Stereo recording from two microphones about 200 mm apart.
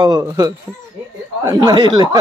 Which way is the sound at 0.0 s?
20° right (ahead or behind).